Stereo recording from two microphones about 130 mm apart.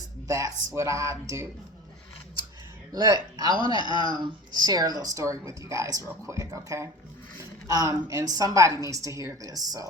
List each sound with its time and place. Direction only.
0.3 s speech: 25° right (ahead or behind)
2.9 s speech: 30° right (ahead or behind)